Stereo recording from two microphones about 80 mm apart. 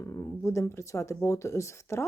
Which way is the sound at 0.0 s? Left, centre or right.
Left.